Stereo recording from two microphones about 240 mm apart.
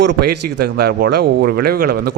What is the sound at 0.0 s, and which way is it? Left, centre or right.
Speech, right.